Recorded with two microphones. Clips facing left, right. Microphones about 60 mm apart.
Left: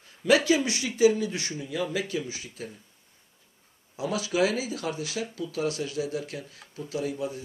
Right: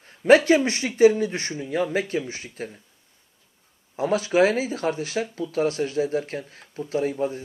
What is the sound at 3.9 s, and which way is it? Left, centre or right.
A man's voice, right.